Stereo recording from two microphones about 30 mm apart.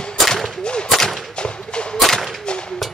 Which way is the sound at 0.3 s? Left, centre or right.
Centre.